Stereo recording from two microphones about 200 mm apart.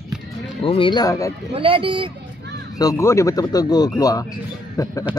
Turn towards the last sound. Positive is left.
turn(degrees=15)  # may be behind; listen again after turning